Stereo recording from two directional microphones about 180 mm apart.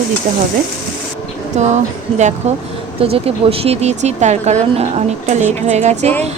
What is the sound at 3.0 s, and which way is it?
Speech, 35° right (ahead or behind).